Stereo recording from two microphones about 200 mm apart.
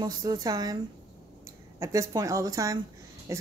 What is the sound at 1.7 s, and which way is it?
Speech, 15° right (ahead or behind).